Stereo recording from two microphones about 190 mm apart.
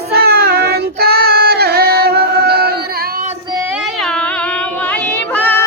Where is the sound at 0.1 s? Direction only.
55° right (ahead or behind).